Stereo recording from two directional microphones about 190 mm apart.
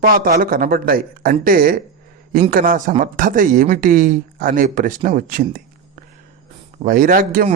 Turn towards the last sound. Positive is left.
turn(degrees=-45)  # may be behind; listen again after turning